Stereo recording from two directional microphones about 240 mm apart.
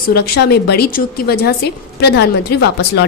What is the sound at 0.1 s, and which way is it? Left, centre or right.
A woman's voice, left.